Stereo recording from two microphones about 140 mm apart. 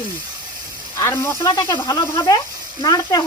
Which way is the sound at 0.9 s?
20° left (ahead or behind).